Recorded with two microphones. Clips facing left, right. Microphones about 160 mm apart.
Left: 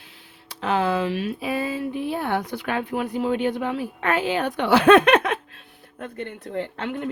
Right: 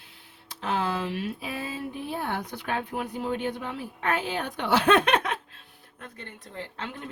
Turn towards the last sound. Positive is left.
turn(degrees=60)  # may be behind; listen again after turning